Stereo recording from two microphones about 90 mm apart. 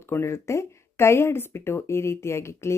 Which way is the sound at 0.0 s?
25° left (ahead or behind).